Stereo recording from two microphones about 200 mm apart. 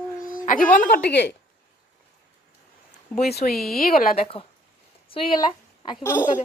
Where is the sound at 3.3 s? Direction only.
50° left (ahead or behind).